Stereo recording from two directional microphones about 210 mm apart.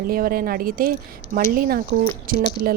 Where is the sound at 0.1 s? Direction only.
45° right (ahead or behind).